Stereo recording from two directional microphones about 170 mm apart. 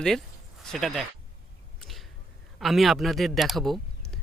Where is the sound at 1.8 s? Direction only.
Centre (ahead or behind).